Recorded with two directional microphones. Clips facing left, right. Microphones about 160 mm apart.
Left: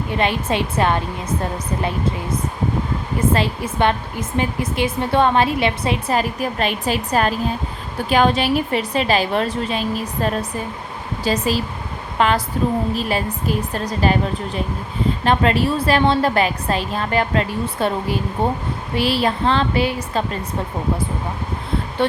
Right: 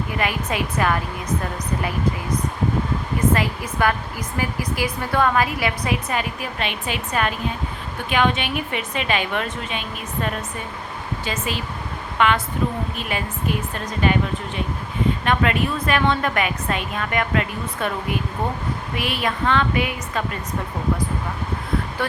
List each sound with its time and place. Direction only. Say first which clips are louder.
0.1 s a woman's voice: left 6 dB; 30° left (ahead or behind)
3.3 s a woman's voice: left 3 dB; 30° left (ahead or behind)